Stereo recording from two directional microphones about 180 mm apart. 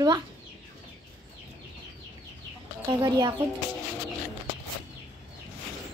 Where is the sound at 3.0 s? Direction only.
20° right (ahead or behind).